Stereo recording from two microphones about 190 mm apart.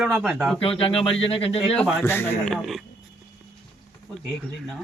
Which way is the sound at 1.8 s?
10° left (ahead or behind).